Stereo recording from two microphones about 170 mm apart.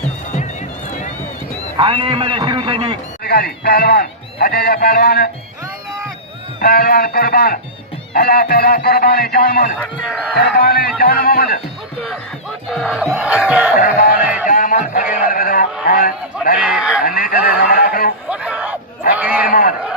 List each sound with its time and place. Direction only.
1.7 s a man's voice: 30° right (ahead or behind)
3.2 s a man's voice: 65° left (ahead or behind)
6.6 s a man's voice: 60° left (ahead or behind)
12.7 s crowd: centre (ahead or behind)
13.7 s speech: 50° left (ahead or behind)
14.2 s crowd: 5° right (ahead or behind)
14.4 s a man's voice: 55° left (ahead or behind)
16.6 s speech: 5° right (ahead or behind)
17.1 s a man's voice: 55° left (ahead or behind)
18.3 s a sound: 5° right (ahead or behind)
19.1 s crowd: 10° right (ahead or behind)
19.5 s speech: 55° left (ahead or behind)